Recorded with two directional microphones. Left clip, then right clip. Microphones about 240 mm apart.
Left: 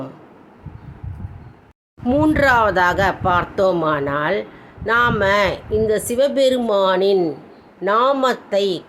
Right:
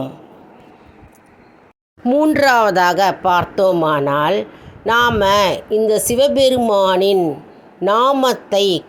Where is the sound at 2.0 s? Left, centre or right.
Centre.